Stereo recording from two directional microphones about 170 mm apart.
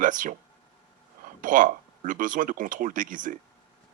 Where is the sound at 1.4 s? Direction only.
50° right (ahead or behind).